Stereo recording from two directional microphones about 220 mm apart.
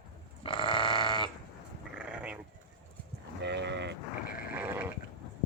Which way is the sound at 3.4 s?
50° right (ahead or behind).